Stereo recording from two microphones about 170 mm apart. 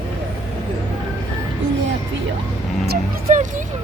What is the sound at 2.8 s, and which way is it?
Vehicle, 70° right (ahead or behind).